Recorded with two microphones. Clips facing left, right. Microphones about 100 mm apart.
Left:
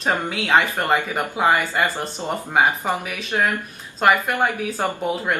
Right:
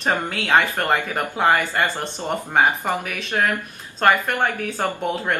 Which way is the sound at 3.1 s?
Centre (ahead or behind).